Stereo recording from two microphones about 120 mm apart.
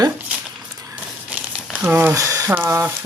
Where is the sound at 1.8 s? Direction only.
15° right (ahead or behind).